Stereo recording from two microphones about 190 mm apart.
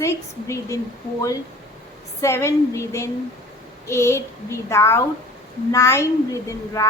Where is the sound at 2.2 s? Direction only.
15° left (ahead or behind).